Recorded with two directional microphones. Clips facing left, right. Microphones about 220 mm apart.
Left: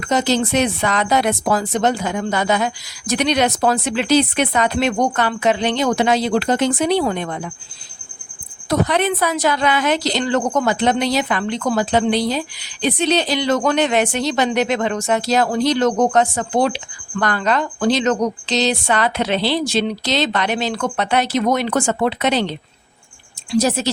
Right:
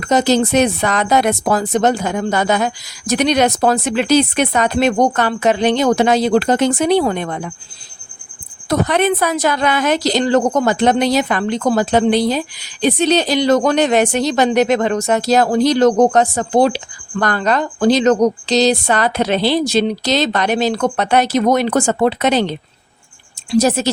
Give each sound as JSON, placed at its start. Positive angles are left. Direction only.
{"t": 0.0, "sound": "speech", "side_deg": -45}
{"t": 8.7, "sound": "speech", "side_deg": -50}